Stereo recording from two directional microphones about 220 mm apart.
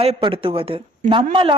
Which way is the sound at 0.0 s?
25° right (ahead or behind).